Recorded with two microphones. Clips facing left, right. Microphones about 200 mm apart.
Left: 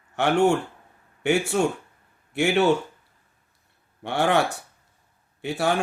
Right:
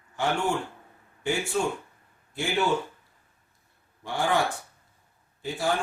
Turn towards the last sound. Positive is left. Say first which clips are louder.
# left 4 dB
turn(degrees=70)  # may be behind; listen again after turning